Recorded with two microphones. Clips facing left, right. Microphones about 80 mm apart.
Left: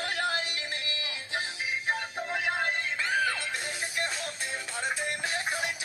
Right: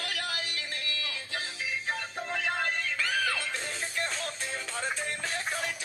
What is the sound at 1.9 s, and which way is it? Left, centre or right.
Music, centre.